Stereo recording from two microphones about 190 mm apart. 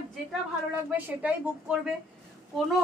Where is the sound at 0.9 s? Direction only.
10° right (ahead or behind).